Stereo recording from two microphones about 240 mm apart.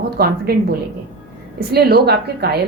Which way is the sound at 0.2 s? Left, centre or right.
Right.